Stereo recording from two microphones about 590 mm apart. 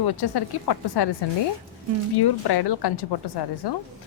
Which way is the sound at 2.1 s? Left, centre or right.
Left.